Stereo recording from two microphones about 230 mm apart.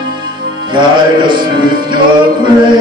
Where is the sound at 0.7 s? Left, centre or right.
Centre.